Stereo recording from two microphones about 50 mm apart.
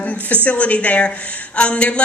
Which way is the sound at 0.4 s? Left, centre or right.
Left.